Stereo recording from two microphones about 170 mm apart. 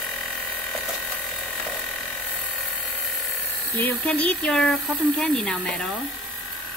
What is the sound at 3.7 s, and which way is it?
Speech, 10° left (ahead or behind).